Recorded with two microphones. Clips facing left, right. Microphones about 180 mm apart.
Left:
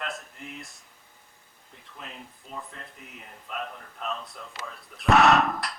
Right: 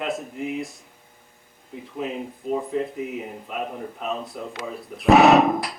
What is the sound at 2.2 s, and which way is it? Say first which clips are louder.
Speech: right 14 dB; 45° right (ahead or behind).